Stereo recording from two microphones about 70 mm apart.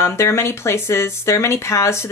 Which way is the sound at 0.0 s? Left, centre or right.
Left.